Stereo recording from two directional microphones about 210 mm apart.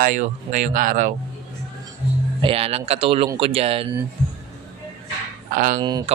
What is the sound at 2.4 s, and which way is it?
Speech, 25° right (ahead or behind).